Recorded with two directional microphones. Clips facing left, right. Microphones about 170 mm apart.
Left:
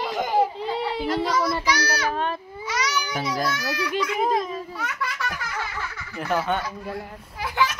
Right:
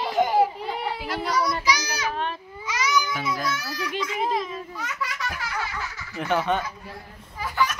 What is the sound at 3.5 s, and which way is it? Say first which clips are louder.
Speech: left 3 dB; 70° left (ahead or behind).